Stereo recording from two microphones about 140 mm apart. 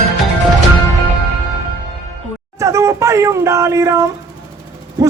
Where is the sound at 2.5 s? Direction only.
20° right (ahead or behind).